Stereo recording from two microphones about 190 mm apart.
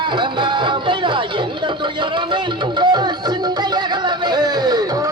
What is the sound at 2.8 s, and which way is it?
Tabla, 25° right (ahead or behind).